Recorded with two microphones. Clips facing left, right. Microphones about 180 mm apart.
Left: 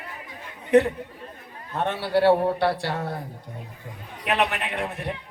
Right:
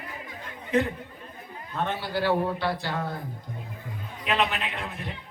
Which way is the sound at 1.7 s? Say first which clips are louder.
Left 6 dB; 70° left (ahead or behind).